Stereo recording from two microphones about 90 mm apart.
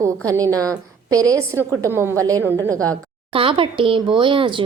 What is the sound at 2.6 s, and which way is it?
Speech, 40° right (ahead or behind).